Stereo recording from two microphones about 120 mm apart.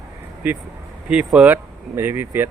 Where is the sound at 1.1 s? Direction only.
10° right (ahead or behind).